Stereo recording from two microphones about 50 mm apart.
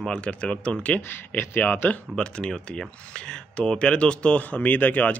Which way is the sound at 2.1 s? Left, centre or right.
Centre.